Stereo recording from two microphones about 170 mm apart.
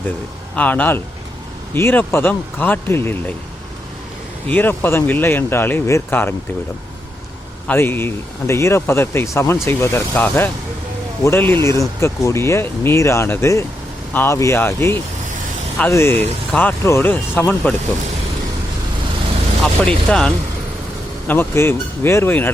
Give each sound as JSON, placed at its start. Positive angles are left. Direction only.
{"t": 0.5, "sound": "speech", "side_deg": 10}
{"t": 4.4, "sound": "speech", "side_deg": 10}
{"t": 7.7, "sound": "speech", "side_deg": 10}
{"t": 20.1, "sound": "speech", "side_deg": 5}